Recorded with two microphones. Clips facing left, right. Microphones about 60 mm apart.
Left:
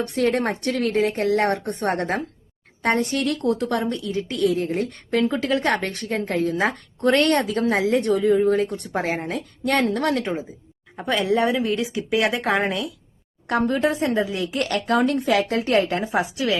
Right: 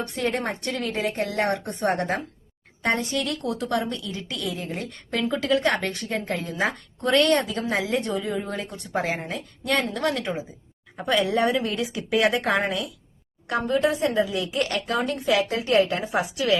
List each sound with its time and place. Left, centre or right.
0.3 s a woman's voice: left
11.0 s speech: left
12.4 s speech: left
13.5 s a woman's voice: left
13.7 s a woman's voice: left
16.2 s speech: left